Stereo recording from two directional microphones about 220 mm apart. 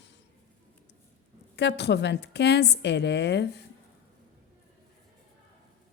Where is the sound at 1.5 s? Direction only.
50° left (ahead or behind).